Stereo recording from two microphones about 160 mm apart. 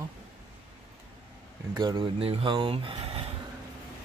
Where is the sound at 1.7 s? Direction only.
25° right (ahead or behind).